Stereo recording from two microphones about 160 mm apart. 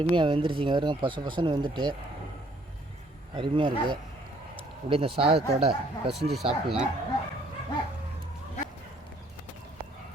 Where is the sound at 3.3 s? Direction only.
30° right (ahead or behind).